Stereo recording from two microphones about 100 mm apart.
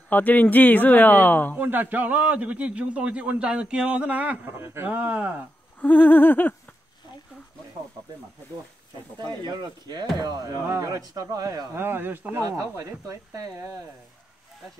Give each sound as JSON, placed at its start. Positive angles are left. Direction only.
{"t": 0.1, "sound": "speech", "side_deg": 15}
{"t": 1.6, "sound": "a man's voice", "side_deg": -20}
{"t": 5.8, "sound": "a sound", "side_deg": 15}
{"t": 9.2, "sound": "speech", "side_deg": -50}
{"t": 11.7, "sound": "speech", "side_deg": -20}
{"t": 12.4, "sound": "speech", "side_deg": -30}